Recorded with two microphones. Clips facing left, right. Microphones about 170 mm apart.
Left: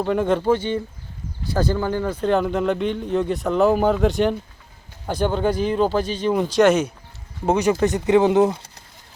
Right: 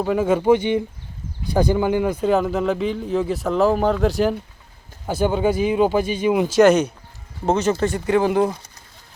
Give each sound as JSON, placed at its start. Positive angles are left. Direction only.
{"t": 0.0, "sound": "speech", "side_deg": -5}
{"t": 7.4, "sound": "speech", "side_deg": 15}